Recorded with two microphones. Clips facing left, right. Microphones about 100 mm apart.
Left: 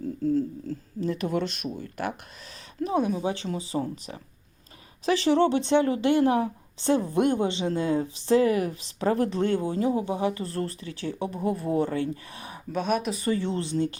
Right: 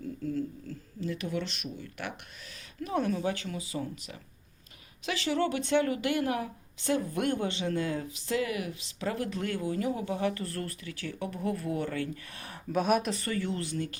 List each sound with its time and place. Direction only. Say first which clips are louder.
0.3 s speech: left 9 dB; 35° left (ahead or behind)
2.8 s speech: left 4 dB; 15° left (ahead or behind)
12.7 s speech: even; 5° right (ahead or behind)
13.1 s speech: left 6 dB; 20° left (ahead or behind)